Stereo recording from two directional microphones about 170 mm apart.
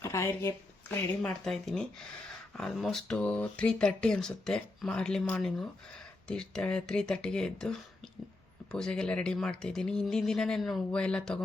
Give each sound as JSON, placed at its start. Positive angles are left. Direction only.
{"t": 0.0, "sound": "speech", "side_deg": 15}